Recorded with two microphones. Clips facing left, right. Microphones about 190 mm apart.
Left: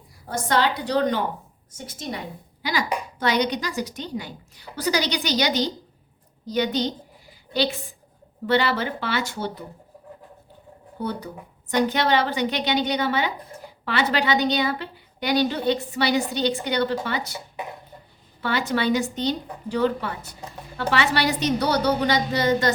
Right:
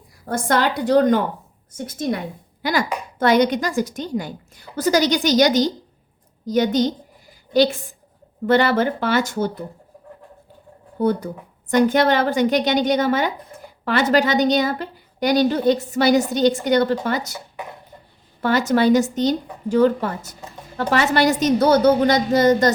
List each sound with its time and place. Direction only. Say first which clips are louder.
0.3 s a woman's voice: right 3 dB; 50° right (ahead or behind)
11.0 s a woman's voice: right 9 dB; 50° right (ahead or behind)
18.4 s a woman's voice: right 7 dB; 45° right (ahead or behind)